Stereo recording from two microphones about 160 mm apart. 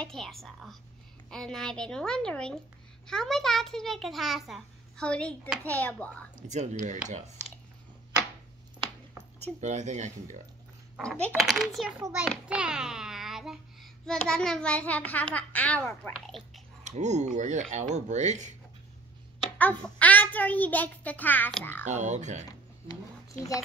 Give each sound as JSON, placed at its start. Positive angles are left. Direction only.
{"t": 0.0, "sound": "a child's voice", "side_deg": 0}
{"t": 6.5, "sound": "speech", "side_deg": -45}
{"t": 9.6, "sound": "speech", "side_deg": -45}
{"t": 11.0, "sound": "a child's voice", "side_deg": 10}
{"t": 12.4, "sound": "child singing", "side_deg": -5}
{"t": 14.2, "sound": "a child's voice", "side_deg": 5}
{"t": 16.8, "sound": "speech", "side_deg": -45}
{"t": 19.6, "sound": "a child's voice", "side_deg": 10}
{"t": 21.8, "sound": "speech", "side_deg": -45}